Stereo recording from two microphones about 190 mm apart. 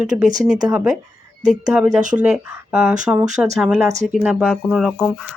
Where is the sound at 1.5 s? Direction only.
5° right (ahead or behind).